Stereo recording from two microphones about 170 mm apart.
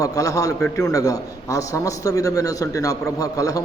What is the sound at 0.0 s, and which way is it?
Speech, 20° left (ahead or behind).